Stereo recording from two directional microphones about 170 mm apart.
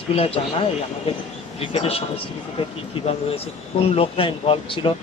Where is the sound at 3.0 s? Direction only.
35° left (ahead or behind).